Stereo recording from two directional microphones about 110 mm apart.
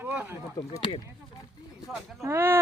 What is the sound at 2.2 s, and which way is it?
Speech, 20° right (ahead or behind).